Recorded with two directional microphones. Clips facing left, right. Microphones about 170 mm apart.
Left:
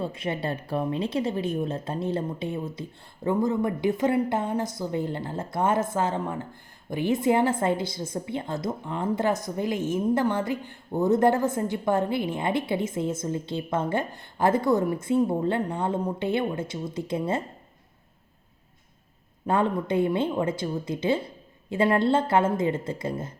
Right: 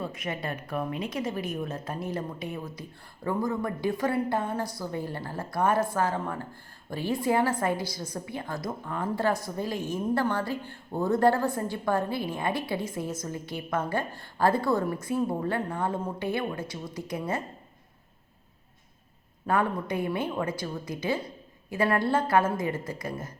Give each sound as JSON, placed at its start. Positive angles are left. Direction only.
{"t": 0.0, "sound": "a woman's voice", "side_deg": 30}
{"t": 19.5, "sound": "a woman's voice", "side_deg": 25}